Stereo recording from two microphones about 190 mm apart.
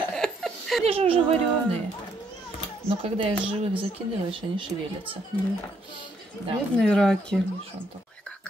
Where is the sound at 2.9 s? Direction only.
30° right (ahead or behind).